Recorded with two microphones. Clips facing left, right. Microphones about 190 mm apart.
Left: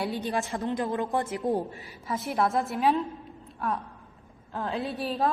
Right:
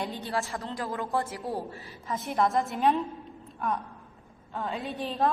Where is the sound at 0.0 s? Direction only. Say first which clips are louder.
Left 3 dB; 15° left (ahead or behind).